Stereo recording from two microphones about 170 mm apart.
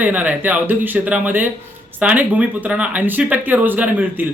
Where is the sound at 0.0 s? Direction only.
10° right (ahead or behind).